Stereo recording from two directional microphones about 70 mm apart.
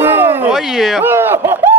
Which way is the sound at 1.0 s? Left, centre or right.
Right.